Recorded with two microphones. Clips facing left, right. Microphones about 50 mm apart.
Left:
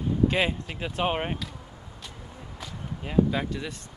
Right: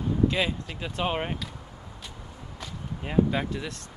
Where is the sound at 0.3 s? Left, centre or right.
Left.